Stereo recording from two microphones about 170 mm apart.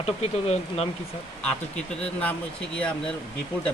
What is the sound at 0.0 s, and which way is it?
Speech, 35° left (ahead or behind).